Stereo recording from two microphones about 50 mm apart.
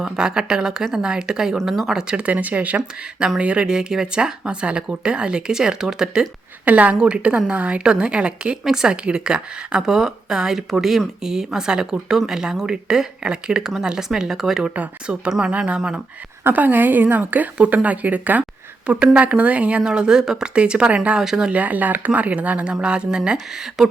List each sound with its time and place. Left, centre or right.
0.0 s a woman's voice: centre
3.2 s speech: centre
6.7 s a woman's voice: right; by 14.7 s centre
14.8 s a woman's voice: right
16.4 s a woman's voice: right
21.2 s speech: centre
21.5 s a woman's voice: right
23.8 s speech: centre